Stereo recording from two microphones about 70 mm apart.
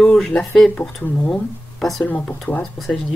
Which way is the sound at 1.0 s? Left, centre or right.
Left.